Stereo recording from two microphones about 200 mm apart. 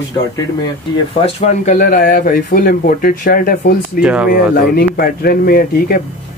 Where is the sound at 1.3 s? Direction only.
40° left (ahead or behind).